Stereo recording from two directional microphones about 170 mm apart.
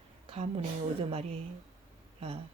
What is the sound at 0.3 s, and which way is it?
A woman's voice, 35° right (ahead or behind).